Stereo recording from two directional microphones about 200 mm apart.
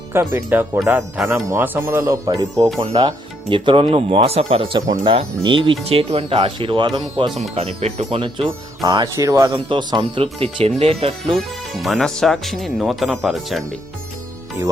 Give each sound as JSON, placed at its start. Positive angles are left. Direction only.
{"t": 0.1, "sound": "speech", "side_deg": -10}
{"t": 11.3, "sound": "speech", "side_deg": 0}